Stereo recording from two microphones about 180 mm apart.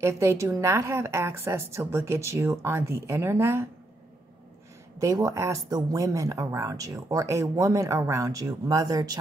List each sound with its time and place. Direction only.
0.0 s a woman's voice: 15° right (ahead or behind)
4.9 s speech: 20° right (ahead or behind)